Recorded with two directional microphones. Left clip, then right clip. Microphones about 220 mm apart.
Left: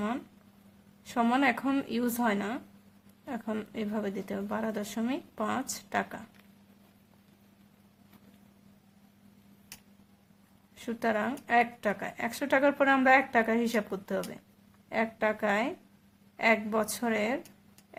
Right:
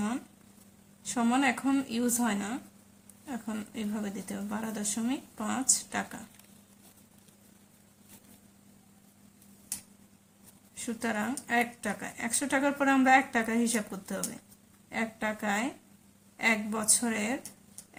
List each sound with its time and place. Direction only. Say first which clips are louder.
1.0 s speech: left 1 dB; 35° left (ahead or behind)
10.8 s speech: left 3 dB; 35° left (ahead or behind)